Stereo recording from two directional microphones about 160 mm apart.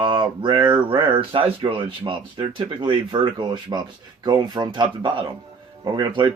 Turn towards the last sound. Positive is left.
turn(degrees=-25)  # may be behind; listen again after turning